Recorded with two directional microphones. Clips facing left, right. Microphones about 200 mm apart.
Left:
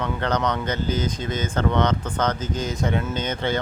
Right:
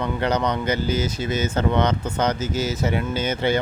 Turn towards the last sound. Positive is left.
turn(degrees=-10)  # may be behind; listen again after turning